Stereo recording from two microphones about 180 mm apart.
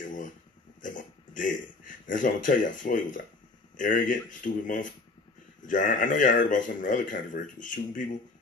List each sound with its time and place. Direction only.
0.7 s a man's voice: 45° left (ahead or behind)